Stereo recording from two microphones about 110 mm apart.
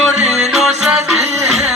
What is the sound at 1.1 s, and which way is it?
Music, 80° right.